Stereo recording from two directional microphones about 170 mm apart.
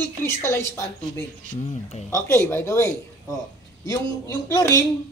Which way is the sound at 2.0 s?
15° left (ahead or behind).